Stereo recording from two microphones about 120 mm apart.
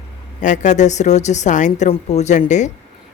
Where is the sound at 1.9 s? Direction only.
70° left (ahead or behind).